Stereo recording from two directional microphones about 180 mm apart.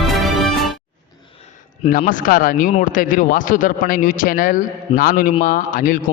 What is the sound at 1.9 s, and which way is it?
Speech, 45° left (ahead or behind).